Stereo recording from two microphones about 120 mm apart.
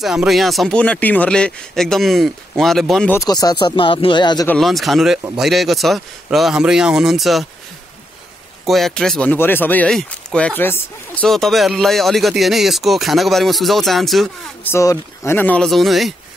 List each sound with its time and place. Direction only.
0.0 s speech: 5° right (ahead or behind)
3.3 s speech: 35° left (ahead or behind)
4.6 s speech: centre (ahead or behind)
8.6 s speech: centre (ahead or behind)
11.2 s speech: centre (ahead or behind)
14.6 s speech: 20° left (ahead or behind)
15.6 s speech: centre (ahead or behind)